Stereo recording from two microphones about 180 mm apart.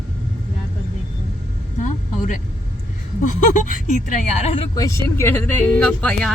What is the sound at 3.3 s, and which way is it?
Speech, 45° left (ahead or behind).